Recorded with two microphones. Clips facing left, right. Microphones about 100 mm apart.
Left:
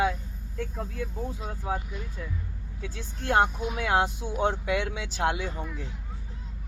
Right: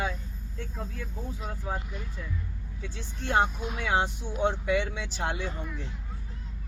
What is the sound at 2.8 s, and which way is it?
Speech, 55° left (ahead or behind).